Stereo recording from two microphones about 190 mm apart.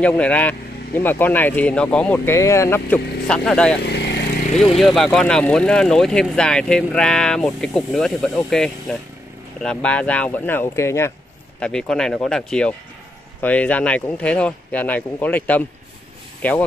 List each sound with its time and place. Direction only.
0.0 s speech: 5° left (ahead or behind)
3.8 s vehicle: 60° left (ahead or behind)
4.7 s speech: centre (ahead or behind)
11.6 s speech: 5° left (ahead or behind)